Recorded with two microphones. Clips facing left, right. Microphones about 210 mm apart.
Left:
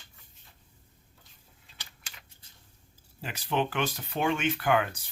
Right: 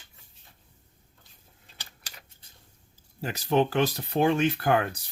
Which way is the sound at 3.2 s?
40° right (ahead or behind).